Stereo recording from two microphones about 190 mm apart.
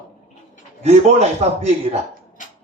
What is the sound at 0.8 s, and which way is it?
Speech, 35° right (ahead or behind).